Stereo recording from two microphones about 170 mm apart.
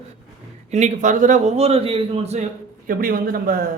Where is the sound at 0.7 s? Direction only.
45° right (ahead or behind).